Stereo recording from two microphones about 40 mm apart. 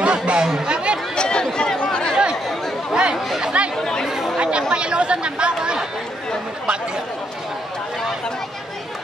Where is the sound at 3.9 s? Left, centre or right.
Centre.